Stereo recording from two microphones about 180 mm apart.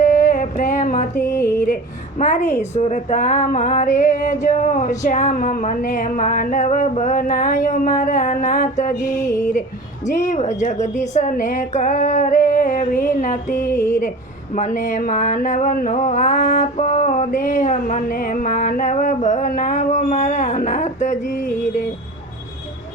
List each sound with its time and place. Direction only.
0.0 s a sound: 45° left (ahead or behind)
1.2 s music: 15° left (ahead or behind)
2.1 s music: 45° left (ahead or behind)
9.2 s music: 15° left (ahead or behind)
10.1 s music: 45° left (ahead or behind)
13.6 s music: 15° left (ahead or behind)
14.5 s a sound: 45° left (ahead or behind)